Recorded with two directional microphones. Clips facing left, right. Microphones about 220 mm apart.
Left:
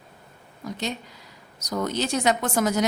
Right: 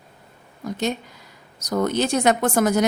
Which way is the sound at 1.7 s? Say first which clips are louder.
Right 5 dB; 55° right (ahead or behind).